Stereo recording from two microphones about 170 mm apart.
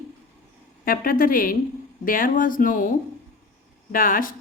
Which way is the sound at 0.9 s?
55° left (ahead or behind).